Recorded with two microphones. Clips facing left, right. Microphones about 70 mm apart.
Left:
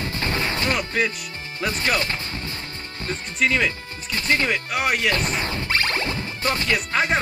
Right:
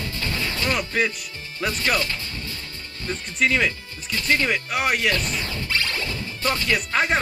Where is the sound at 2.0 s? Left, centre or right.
Left.